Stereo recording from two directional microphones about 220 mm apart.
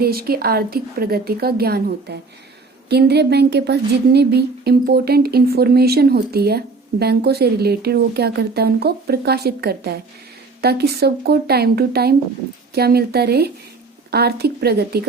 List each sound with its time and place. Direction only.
0.0 s a woman's voice: 45° right (ahead or behind)